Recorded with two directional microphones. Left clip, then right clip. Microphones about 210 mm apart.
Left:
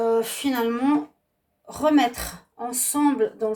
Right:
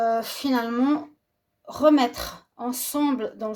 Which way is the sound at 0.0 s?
40° right (ahead or behind).